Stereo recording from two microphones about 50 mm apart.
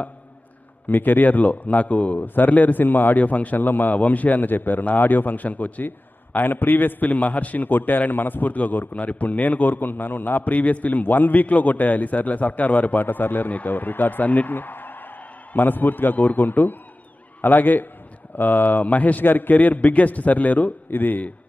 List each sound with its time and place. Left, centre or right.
0.8 s a man's voice: left